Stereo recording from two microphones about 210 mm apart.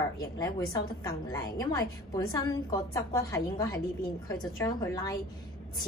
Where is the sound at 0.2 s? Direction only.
20° left (ahead or behind).